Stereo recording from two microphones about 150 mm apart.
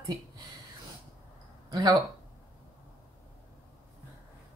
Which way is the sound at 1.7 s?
30° right (ahead or behind).